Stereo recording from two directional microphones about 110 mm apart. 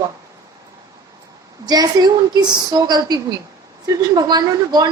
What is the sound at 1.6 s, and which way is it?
A woman's voice, 35° right (ahead or behind).